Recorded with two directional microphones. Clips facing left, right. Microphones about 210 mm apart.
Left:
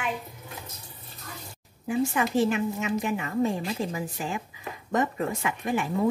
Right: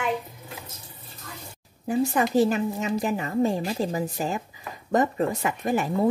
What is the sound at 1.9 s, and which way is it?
A woman's voice, 40° right (ahead or behind).